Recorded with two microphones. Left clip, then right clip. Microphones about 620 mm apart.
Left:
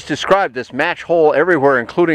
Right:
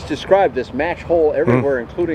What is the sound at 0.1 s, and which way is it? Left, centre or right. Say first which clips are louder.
Speech: even; left.